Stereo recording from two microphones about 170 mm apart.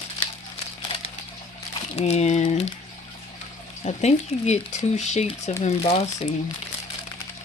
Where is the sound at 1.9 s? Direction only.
40° left (ahead or behind).